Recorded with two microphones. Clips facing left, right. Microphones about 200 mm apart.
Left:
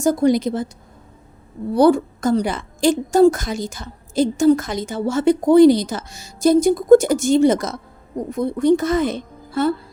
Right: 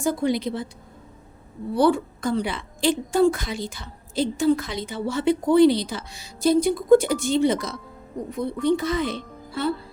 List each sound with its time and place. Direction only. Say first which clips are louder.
0.0 s a woman's voice: left 7 dB; 45° left (ahead or behind)
1.7 s a woman's voice: left 6 dB; 40° left (ahead or behind)